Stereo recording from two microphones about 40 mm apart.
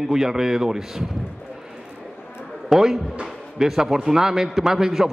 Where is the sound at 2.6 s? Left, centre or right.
Centre.